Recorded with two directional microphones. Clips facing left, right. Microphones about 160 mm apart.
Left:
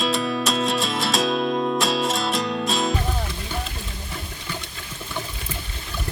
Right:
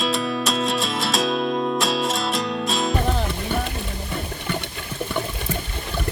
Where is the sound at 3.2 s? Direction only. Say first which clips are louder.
Right 6 dB; 60° right (ahead or behind).